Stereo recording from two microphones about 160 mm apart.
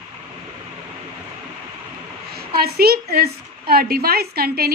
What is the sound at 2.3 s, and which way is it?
A woman's voice, 70° right (ahead or behind).